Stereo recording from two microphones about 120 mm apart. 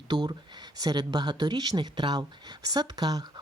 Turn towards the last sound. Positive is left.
turn(degrees=-35)  # may be behind; listen again after turning